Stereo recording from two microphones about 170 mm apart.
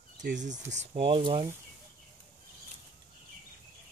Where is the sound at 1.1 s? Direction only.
30° right (ahead or behind).